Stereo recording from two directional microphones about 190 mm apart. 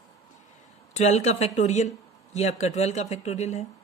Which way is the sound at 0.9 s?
35° left (ahead or behind).